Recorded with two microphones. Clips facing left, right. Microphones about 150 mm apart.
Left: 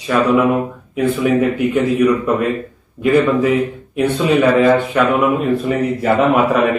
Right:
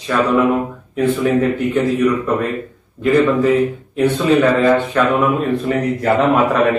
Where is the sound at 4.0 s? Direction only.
10° left (ahead or behind).